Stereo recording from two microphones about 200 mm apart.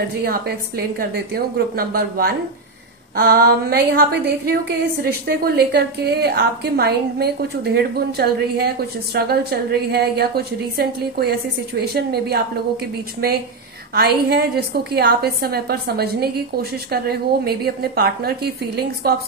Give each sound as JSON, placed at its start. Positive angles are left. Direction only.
{"t": 0.2, "sound": "a woman's voice", "side_deg": -50}
{"t": 13.9, "sound": "a woman's voice", "side_deg": -50}